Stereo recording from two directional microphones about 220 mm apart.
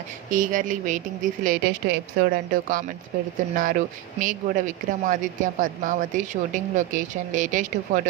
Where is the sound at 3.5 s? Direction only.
40° right (ahead or behind).